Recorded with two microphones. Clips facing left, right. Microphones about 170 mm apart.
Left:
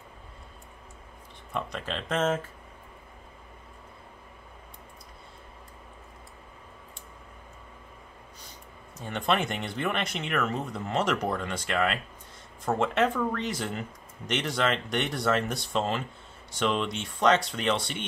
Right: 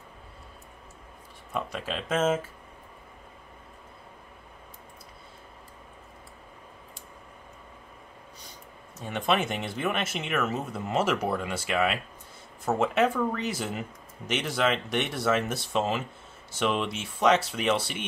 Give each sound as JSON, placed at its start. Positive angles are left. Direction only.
{"t": 1.5, "sound": "speech", "side_deg": -5}
{"t": 9.0, "sound": "speech", "side_deg": -5}